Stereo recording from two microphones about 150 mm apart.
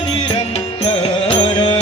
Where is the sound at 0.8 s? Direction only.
40° left (ahead or behind).